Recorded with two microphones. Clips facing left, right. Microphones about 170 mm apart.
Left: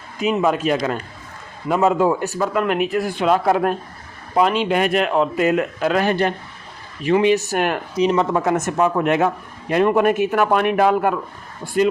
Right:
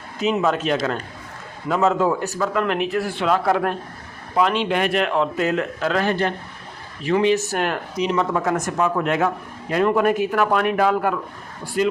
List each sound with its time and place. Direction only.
0.2 s speech: 10° left (ahead or behind)
7.9 s a man's voice: 30° left (ahead or behind)
11.8 s speech: 25° right (ahead or behind)